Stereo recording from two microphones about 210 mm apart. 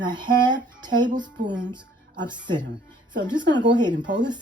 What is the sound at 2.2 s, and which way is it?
Speech, 20° right (ahead or behind).